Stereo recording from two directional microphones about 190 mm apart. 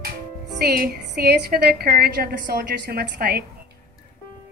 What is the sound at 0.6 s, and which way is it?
A woman's voice, 55° right (ahead or behind).